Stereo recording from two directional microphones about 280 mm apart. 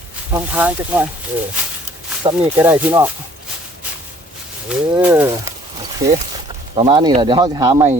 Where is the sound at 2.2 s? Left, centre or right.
Centre.